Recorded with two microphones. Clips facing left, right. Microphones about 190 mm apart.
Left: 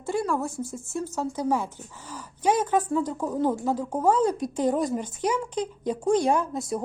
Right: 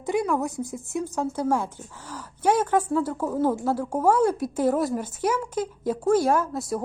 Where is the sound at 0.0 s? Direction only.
15° right (ahead or behind).